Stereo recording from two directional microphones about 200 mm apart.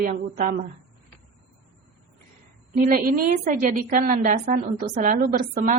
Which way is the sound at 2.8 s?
45° right (ahead or behind).